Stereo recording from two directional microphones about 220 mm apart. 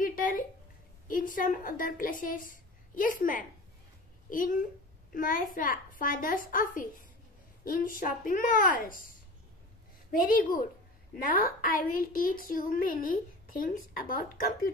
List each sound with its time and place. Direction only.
0.0 s a sound: 40° left (ahead or behind)
1.0 s a woman's voice: 40° left (ahead or behind)
10.1 s a woman's voice: 40° left (ahead or behind)